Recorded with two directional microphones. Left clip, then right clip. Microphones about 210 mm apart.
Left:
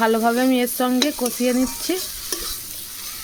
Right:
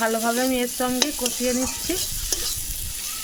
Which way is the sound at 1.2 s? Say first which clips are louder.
Left 3 dB; 55° left (ahead or behind).